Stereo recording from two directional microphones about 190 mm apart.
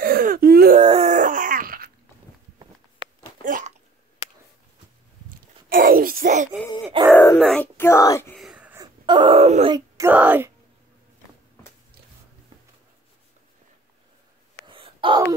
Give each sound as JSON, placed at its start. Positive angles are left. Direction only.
{"t": 0.0, "sound": "wail", "side_deg": -50}
{"t": 0.7, "sound": "groan", "side_deg": -35}
{"t": 3.4, "sound": "hiccup", "side_deg": -45}
{"t": 5.7, "sound": "a sound", "side_deg": -50}
{"t": 7.0, "sound": "groan", "side_deg": -25}
{"t": 7.3, "sound": "dog", "side_deg": 0}
{"t": 7.7, "sound": "a sound", "side_deg": 15}
{"t": 8.4, "sound": "a sound", "side_deg": -5}
{"t": 8.8, "sound": "wail", "side_deg": -25}
{"t": 9.8, "sound": "wail", "side_deg": -15}
{"t": 14.7, "sound": "wail", "side_deg": -25}